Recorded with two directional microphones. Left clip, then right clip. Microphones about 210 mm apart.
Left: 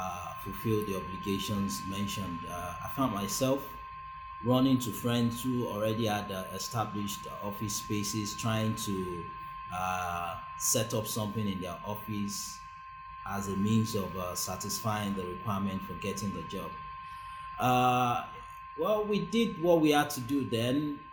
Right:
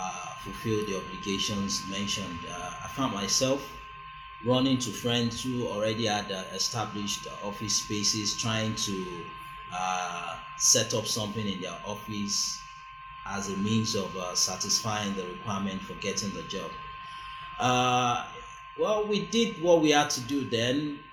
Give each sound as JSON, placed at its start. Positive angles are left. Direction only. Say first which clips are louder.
{"t": 0.7, "sound": "a man's voice", "louder": "right 2 dB", "side_deg": 30}
{"t": 9.7, "sound": "a man's voice", "louder": "right 2 dB", "side_deg": 25}
{"t": 13.3, "sound": "a man's voice", "louder": "right 2 dB", "side_deg": 30}